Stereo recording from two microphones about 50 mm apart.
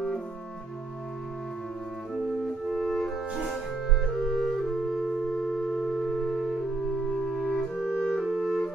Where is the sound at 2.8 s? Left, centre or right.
Centre.